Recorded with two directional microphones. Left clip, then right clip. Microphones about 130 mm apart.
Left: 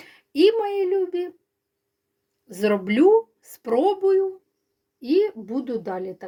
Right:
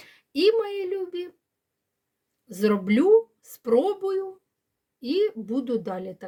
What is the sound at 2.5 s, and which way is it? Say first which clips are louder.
Speech: left 1 dB; 15° right (ahead or behind).